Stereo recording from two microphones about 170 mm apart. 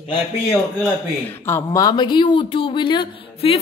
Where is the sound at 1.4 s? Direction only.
15° left (ahead or behind).